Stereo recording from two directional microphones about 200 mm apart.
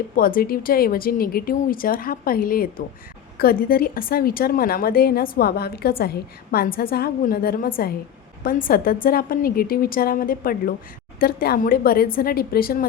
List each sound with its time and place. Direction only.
0.2 s a woman's voice: 45° left (ahead or behind)